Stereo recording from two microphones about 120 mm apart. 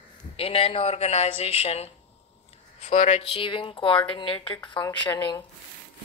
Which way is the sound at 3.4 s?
45° left (ahead or behind).